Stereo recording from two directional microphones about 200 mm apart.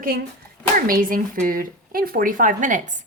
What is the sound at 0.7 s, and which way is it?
A woman's voice, 45° right (ahead or behind).